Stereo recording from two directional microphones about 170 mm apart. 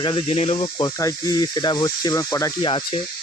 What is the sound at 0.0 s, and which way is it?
Speech, 30° left (ahead or behind).